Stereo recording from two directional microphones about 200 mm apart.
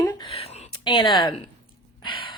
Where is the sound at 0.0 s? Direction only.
25° left (ahead or behind).